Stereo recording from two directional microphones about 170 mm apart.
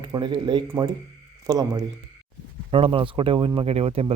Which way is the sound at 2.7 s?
30° right (ahead or behind).